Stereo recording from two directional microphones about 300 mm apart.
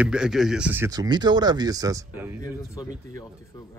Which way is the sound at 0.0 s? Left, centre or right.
Centre.